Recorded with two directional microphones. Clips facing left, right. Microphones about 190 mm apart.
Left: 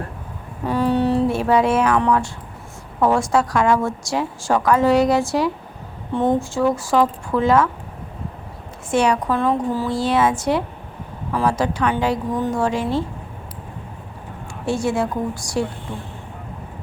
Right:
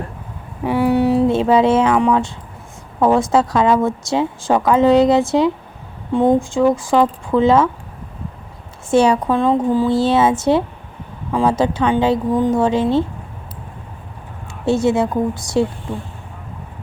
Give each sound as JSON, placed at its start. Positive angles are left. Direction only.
{"t": 0.6, "sound": "a sound", "side_deg": -10}
{"t": 1.3, "sound": "a woman's voice", "side_deg": -20}
{"t": 8.9, "sound": "a woman's voice", "side_deg": -30}
{"t": 14.6, "sound": "a woman's voice", "side_deg": -25}